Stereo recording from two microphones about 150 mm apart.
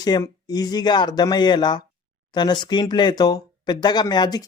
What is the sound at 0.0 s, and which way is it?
Speech, 25° left (ahead or behind).